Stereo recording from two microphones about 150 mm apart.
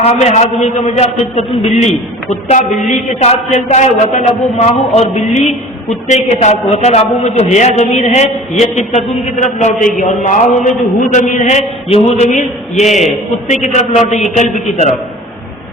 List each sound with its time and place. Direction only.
0.0 s a man's voice: 45° left (ahead or behind)
2.9 s a man's voice: 50° left (ahead or behind)